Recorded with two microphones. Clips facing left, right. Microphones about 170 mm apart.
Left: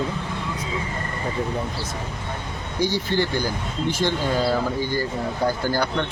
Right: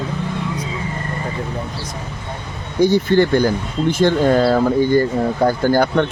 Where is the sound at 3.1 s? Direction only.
55° right (ahead or behind).